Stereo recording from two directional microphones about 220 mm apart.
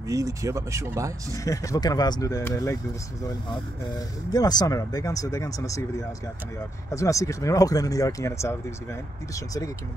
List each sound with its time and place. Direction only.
0.1 s speech: 15° right (ahead or behind)
1.3 s speech: 15° left (ahead or behind)
4.3 s speech: 20° left (ahead or behind)